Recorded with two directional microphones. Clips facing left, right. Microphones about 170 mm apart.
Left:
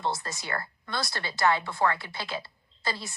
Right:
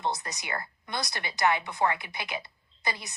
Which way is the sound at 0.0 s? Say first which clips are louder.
Left 1 dB; 20° right (ahead or behind).